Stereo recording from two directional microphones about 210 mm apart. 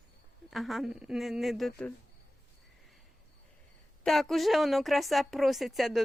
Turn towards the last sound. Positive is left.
turn(degrees=0)  # may be behind; listen again after turning